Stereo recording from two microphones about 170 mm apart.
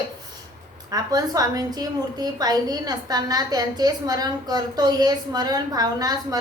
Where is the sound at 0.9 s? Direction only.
20° right (ahead or behind).